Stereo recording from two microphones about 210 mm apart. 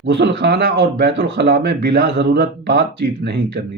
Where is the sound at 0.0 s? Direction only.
55° right (ahead or behind).